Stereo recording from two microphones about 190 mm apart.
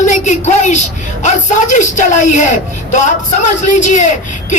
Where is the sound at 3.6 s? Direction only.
40° left (ahead or behind).